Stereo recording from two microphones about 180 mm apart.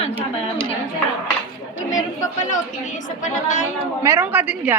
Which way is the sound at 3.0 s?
45° left (ahead or behind).